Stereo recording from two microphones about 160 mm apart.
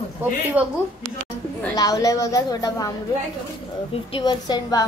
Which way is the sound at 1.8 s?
20° left (ahead or behind).